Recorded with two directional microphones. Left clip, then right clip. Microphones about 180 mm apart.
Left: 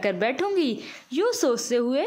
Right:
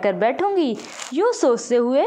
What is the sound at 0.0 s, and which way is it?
Speech, 15° left (ahead or behind).